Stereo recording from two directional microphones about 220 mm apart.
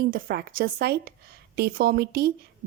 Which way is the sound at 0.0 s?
45° right (ahead or behind).